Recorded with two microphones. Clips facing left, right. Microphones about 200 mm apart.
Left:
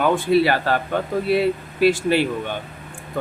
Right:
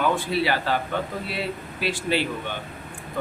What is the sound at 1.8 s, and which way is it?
Speech, 50° left (ahead or behind).